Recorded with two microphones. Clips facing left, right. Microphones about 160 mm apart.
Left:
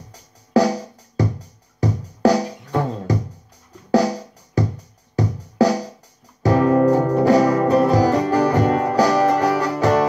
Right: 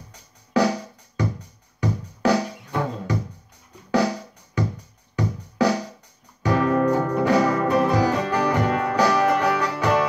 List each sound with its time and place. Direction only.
0.1 s music: 40° left (ahead or behind)